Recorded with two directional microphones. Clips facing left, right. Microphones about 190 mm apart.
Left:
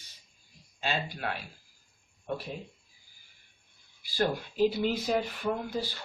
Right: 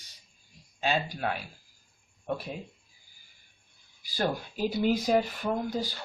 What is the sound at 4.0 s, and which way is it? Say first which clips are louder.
Speech: left 1 dB; 40° right (ahead or behind).